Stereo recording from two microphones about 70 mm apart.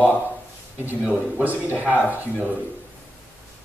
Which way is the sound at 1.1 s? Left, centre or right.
Right.